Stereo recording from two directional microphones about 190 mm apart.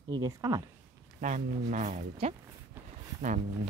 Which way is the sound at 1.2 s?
40° right (ahead or behind).